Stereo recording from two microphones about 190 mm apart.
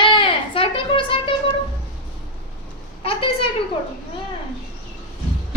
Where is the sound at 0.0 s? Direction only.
25° left (ahead or behind).